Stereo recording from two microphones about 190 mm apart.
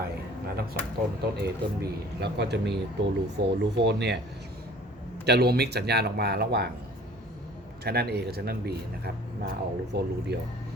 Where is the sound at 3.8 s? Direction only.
65° right (ahead or behind).